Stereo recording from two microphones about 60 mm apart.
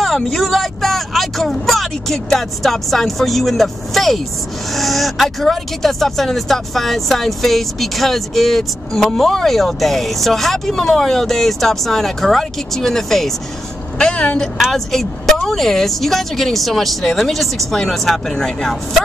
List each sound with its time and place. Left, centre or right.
0.0 s speech: centre
13.9 s speech: centre
14.6 s speech: centre